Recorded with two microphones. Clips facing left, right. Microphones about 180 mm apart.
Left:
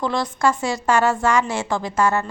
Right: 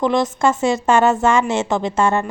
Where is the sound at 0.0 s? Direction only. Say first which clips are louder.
Right 4 dB; 20° right (ahead or behind).